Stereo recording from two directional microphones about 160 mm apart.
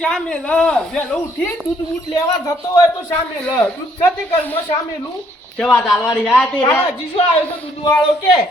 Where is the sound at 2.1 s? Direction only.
20° left (ahead or behind).